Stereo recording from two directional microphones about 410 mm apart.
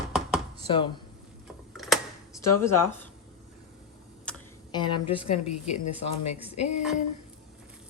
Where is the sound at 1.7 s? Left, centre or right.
Centre.